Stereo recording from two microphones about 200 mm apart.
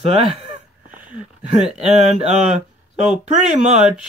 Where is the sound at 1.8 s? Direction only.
35° right (ahead or behind).